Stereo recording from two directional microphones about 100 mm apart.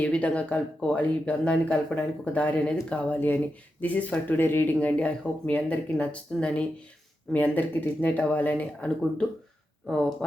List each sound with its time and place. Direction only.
0.0 s speech: 15° left (ahead or behind)